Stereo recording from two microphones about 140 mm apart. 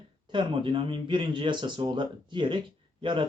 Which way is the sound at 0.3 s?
35° right (ahead or behind).